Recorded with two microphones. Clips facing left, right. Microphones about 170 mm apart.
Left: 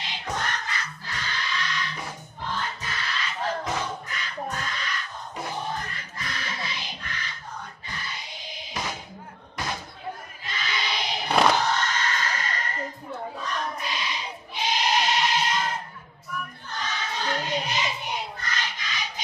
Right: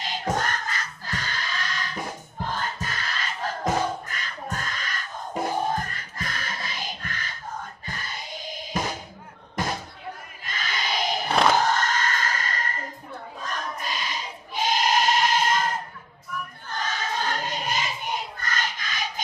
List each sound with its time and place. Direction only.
0.0 s music: 45° right (ahead or behind)
10.4 s a sound: 45° right (ahead or behind)
13.4 s sheep: 45° right (ahead or behind)
16.6 s choir: 45° right (ahead or behind)